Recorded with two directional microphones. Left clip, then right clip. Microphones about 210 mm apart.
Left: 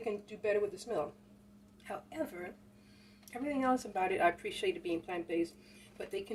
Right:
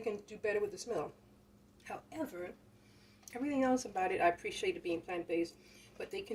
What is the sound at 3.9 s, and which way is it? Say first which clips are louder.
Speech: left 1 dB; 20° left (ahead or behind).